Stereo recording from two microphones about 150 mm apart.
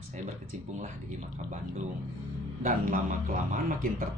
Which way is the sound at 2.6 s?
55° right (ahead or behind).